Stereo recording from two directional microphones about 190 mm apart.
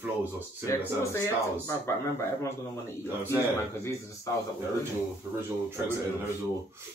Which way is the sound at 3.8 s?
15° left (ahead or behind).